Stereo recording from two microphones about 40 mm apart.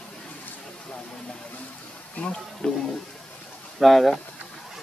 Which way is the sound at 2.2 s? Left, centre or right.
Left.